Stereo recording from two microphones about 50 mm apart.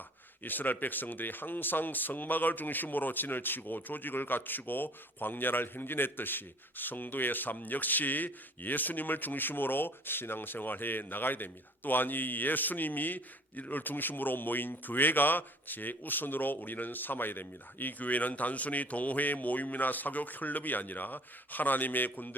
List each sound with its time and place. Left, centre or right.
0.4 s speech: left